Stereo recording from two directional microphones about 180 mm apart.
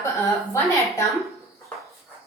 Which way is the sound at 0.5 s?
15° left (ahead or behind).